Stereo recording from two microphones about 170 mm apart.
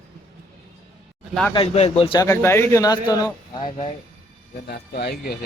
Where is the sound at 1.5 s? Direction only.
35° left (ahead or behind).